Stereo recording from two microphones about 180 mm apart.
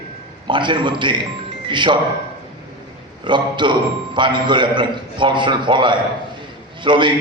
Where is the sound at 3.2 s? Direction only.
25° right (ahead or behind).